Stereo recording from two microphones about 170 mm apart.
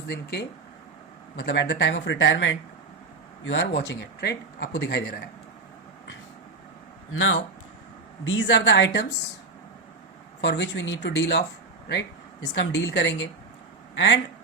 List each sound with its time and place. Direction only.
0.1 s speech: 70° left (ahead or behind)
1.4 s speech: 90° left
8.3 s speech: 90° left
10.4 s speech: 90° left
12.5 s speech: 90° left